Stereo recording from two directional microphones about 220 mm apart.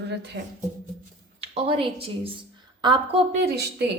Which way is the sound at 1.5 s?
25° right (ahead or behind).